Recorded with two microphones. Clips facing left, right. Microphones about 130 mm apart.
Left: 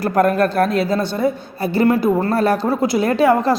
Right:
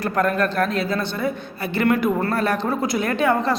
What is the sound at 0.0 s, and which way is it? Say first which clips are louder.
A woman's voice: left 5 dB; 40° left (ahead or behind).